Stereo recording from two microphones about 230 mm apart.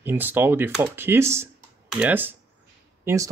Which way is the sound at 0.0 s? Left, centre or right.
Centre.